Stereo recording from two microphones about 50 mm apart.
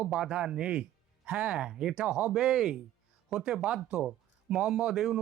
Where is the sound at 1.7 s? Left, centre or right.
Centre.